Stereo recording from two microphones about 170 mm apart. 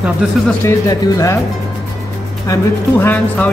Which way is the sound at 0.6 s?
15° left (ahead or behind).